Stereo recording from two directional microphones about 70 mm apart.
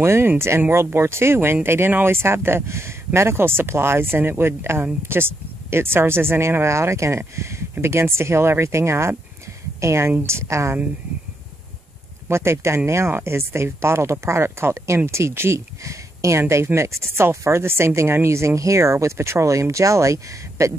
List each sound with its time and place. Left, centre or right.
0.0 s speech: right
12.3 s speech: right